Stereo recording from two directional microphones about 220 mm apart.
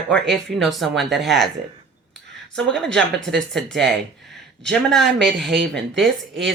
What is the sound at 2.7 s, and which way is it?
Speech, centre (ahead or behind).